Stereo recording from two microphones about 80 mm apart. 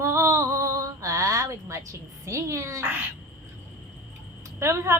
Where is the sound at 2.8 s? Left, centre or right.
Right.